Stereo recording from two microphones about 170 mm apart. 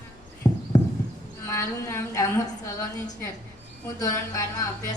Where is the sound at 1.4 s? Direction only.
15° left (ahead or behind).